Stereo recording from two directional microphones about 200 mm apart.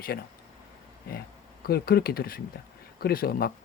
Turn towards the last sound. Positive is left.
turn(degrees=50)  # may be behind; listen again after turning